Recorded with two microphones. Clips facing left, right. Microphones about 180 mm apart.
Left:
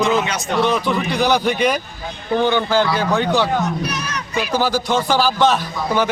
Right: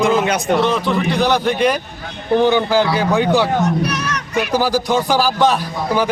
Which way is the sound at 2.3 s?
15° right (ahead or behind).